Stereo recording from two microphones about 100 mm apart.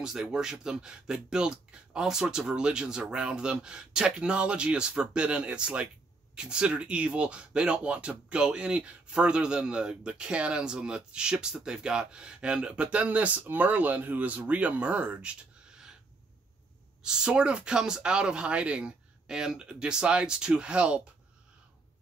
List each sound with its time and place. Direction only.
0.0 s speech: 5° right (ahead or behind)
17.0 s speech: 5° right (ahead or behind)